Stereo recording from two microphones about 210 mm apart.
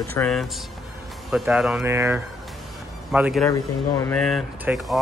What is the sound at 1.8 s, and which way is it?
Speech, 10° right (ahead or behind).